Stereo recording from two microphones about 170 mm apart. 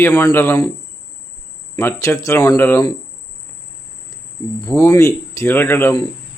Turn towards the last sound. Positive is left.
turn(degrees=15)  # may be behind; listen again after turning